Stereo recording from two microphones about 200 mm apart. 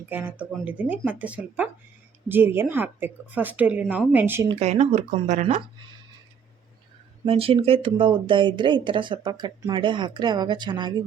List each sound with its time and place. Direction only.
0.0 s speech: 10° right (ahead or behind)
4.4 s speech: 35° right (ahead or behind)
7.3 s speech: 30° right (ahead or behind)